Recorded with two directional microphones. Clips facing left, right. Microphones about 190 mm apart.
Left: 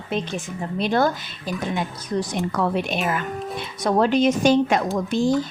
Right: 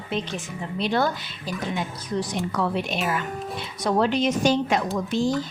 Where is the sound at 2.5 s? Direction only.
50° left (ahead or behind).